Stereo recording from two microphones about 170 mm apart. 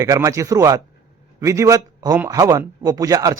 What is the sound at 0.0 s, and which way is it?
A man's voice, 20° right (ahead or behind).